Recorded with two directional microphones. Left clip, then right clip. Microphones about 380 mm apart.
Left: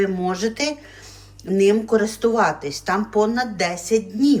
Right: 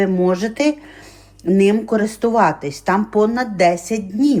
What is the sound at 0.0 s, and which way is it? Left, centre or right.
Speech, centre.